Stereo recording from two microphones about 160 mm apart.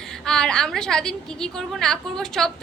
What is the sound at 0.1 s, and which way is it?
A woman's voice, 5° left (ahead or behind).